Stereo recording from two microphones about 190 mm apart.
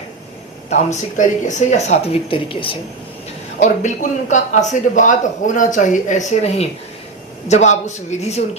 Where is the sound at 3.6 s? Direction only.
40° left (ahead or behind).